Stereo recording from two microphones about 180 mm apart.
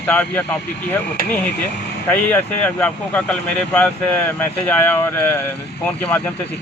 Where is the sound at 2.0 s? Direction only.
10° left (ahead or behind).